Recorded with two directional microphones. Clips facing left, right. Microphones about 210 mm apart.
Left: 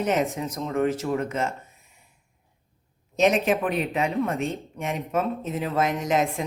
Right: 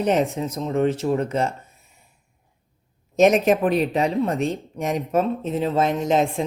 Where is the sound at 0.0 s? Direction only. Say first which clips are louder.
Right 4 dB; 30° right (ahead or behind).